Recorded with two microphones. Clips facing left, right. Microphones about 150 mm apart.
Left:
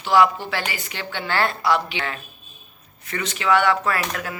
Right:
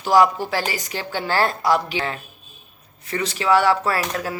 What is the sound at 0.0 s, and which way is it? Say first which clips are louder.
Speech: right 1 dB; 40° right (ahead or behind).